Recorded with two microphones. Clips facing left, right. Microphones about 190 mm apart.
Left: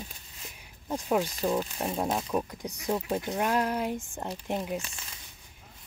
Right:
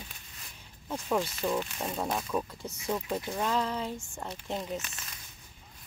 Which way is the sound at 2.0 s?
20° left (ahead or behind).